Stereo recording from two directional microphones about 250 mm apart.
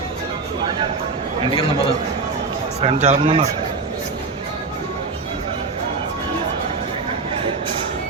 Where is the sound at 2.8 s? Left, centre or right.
Right.